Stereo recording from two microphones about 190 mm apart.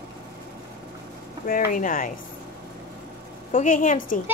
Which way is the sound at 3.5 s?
45° left (ahead or behind).